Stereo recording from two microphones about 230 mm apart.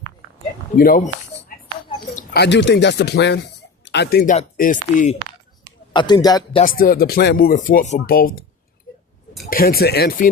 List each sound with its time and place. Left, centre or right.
0.8 s a sound: left
2.4 s speech: left
5.9 s a man's voice: centre
6.6 s speech: left
9.5 s speech: left